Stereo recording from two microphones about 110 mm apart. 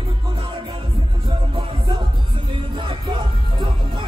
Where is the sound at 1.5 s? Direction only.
50° right (ahead or behind).